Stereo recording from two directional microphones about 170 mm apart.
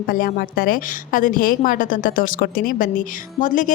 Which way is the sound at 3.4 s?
50° left (ahead or behind).